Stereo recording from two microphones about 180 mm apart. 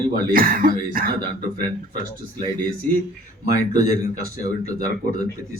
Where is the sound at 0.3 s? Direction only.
55° right (ahead or behind).